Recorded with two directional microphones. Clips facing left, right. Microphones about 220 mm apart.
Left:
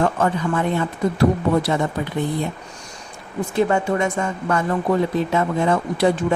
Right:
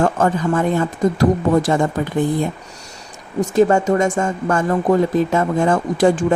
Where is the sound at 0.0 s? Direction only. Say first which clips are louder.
Right 3 dB; 45° right (ahead or behind).